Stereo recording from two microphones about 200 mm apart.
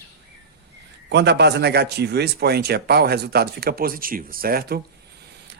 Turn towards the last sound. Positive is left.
turn(degrees=-50)  # may be behind; listen again after turning